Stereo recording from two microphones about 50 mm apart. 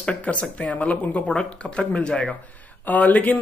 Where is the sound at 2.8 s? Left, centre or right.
Left.